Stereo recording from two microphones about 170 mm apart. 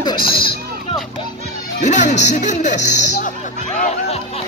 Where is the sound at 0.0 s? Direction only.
30° left (ahead or behind).